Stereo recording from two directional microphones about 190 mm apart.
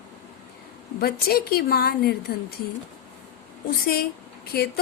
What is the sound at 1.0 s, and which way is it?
A woman's voice, 55° left (ahead or behind).